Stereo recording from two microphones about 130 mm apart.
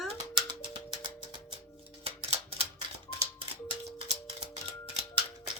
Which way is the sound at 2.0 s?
50° right (ahead or behind).